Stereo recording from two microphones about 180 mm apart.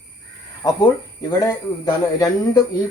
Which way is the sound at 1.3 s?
20° left (ahead or behind).